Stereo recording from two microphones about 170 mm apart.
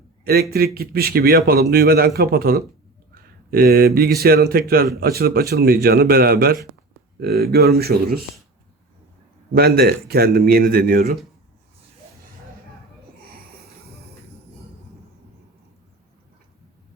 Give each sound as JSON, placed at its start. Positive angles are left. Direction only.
{"t": 0.5, "sound": "a man's voice", "side_deg": -65}
{"t": 9.5, "sound": "a man's voice", "side_deg": -65}